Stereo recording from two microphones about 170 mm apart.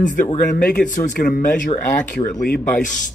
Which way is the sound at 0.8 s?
50° left (ahead or behind).